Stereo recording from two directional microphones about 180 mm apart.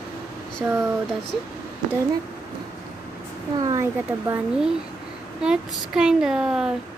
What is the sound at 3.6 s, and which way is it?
Speech, 15° right (ahead or behind).